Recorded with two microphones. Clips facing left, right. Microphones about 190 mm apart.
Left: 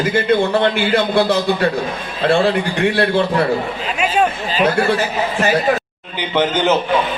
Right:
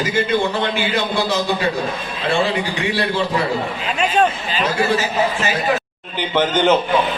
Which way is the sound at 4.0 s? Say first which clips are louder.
Even; 10° left (ahead or behind).